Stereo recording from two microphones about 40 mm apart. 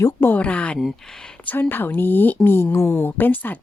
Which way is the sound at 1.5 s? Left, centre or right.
Left.